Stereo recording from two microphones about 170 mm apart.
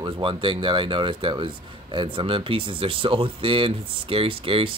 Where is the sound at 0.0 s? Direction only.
30° right (ahead or behind).